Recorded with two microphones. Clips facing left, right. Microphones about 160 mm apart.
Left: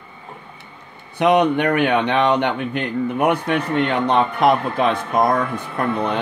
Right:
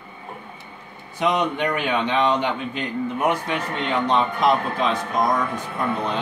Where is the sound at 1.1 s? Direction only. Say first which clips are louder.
Left 7 dB; 65° left (ahead or behind).